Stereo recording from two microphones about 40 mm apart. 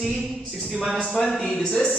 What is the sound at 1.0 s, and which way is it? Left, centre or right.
Mantra, centre.